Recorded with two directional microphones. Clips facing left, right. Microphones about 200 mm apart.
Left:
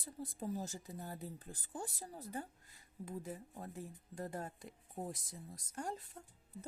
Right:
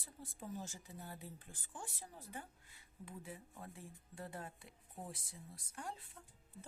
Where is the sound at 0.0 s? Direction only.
40° left (ahead or behind).